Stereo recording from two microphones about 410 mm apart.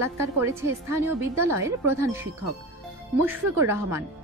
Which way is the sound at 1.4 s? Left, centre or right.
Centre.